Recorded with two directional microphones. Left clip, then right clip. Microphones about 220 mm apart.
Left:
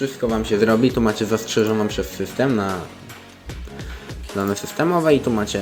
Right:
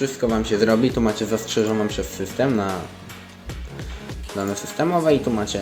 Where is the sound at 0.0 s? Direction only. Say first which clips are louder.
Even; centre (ahead or behind).